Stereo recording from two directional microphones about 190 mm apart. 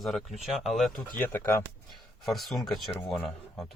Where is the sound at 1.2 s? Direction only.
10° left (ahead or behind).